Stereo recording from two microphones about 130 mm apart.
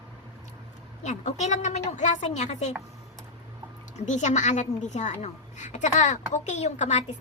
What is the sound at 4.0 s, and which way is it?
A woman's voice, 65° left (ahead or behind).